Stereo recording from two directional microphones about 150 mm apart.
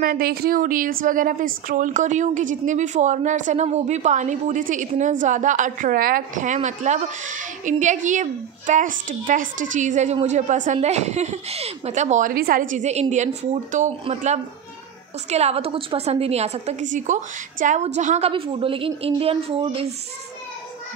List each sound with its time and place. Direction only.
0.0 s a woman's voice: 75° right (ahead or behind); by 13.9 s 55° right (ahead or behind)
15.2 s a woman's voice: 45° right (ahead or behind)
18.3 s a woman's voice: 40° right (ahead or behind)